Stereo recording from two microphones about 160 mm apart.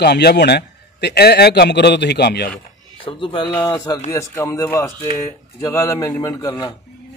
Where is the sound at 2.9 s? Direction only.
35° left (ahead or behind).